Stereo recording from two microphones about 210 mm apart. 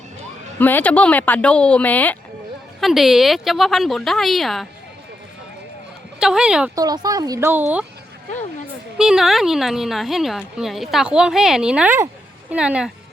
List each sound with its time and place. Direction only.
0.6 s a woman's voice: 10° left (ahead or behind)
6.1 s speech: 5° right (ahead or behind)
6.7 s speech: 20° right (ahead or behind)
9.0 s speech: 5° right (ahead or behind)